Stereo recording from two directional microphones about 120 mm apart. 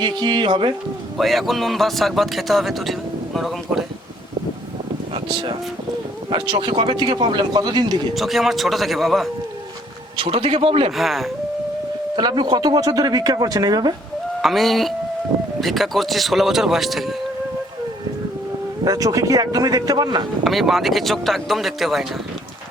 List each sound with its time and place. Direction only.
0.0 s speech: 40° right (ahead or behind)
1.2 s speech: centre (ahead or behind)
5.1 s speech: 45° right (ahead or behind)
8.1 s speech: centre (ahead or behind)
10.2 s a man's voice: 55° right (ahead or behind)
10.9 s speech: centre (ahead or behind)
12.1 s speech: 40° right (ahead or behind)
14.4 s speech: centre (ahead or behind)
18.9 s speech: 30° right (ahead or behind)
20.4 s speech: centre (ahead or behind)